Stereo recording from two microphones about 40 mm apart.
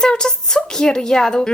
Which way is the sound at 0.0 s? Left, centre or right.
Centre.